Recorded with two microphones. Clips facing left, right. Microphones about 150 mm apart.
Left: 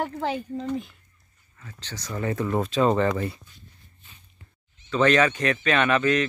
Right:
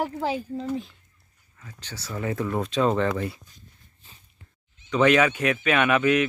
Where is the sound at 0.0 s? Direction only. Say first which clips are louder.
Right 1 dB; 5° right (ahead or behind).